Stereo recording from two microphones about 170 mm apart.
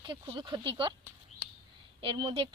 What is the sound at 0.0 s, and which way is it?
Speech, 30° right (ahead or behind).